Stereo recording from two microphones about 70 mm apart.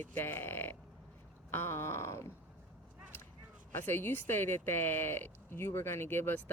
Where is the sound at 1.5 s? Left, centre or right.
Left.